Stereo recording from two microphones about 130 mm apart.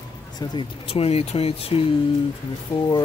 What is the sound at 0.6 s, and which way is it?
Speech, 45° left (ahead or behind).